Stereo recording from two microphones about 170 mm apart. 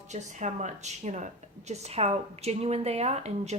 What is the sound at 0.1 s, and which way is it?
A woman's voice, 45° right (ahead or behind).